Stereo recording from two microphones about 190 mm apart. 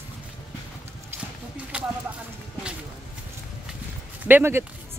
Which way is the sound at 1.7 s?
5° right (ahead or behind).